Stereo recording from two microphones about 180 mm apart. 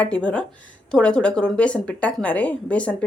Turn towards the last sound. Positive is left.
turn(degrees=5)  # may be behind; listen again after turning